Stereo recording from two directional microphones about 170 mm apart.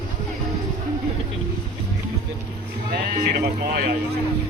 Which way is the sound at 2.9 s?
65° right (ahead or behind).